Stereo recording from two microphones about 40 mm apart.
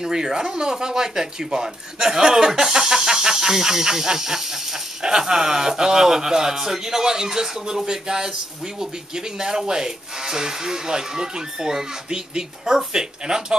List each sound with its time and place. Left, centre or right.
0.0 s speech: centre